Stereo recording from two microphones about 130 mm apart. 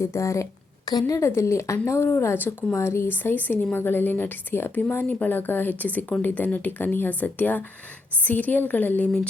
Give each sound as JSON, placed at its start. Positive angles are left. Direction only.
{"t": 0.0, "sound": "speech", "side_deg": 20}